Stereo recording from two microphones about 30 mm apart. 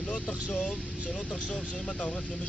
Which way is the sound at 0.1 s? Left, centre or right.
Left.